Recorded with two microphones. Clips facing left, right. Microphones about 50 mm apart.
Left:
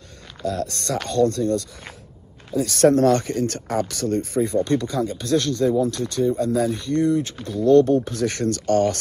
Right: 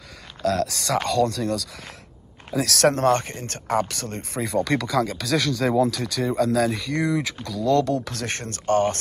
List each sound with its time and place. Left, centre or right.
0.4 s speech: right
2.9 s speech: right
4.4 s speech: right
5.7 s speech: right
8.3 s speech: right